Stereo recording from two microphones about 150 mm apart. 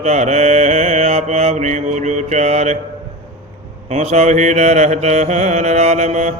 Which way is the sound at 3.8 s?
50° right (ahead or behind).